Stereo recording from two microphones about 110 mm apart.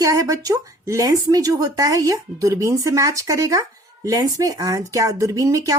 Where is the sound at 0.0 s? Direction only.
30° right (ahead or behind).